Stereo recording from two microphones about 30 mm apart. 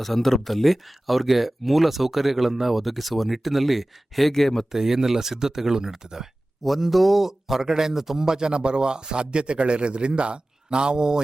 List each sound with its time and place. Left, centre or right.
0.0 s speech: centre
4.3 s speech: centre
4.7 s speech: centre
6.7 s speech: centre; by 11.2 s right